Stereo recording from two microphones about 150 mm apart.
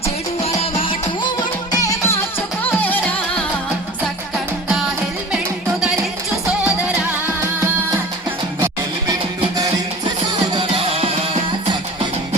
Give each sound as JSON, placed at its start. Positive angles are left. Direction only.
{"t": 0.6, "sound": "music", "side_deg": 35}
{"t": 1.7, "sound": "music", "side_deg": 25}
{"t": 2.8, "sound": "music", "side_deg": 10}
{"t": 10.5, "sound": "music", "side_deg": -40}